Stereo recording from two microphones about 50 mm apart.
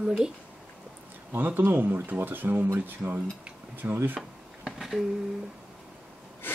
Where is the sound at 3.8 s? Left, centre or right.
Right.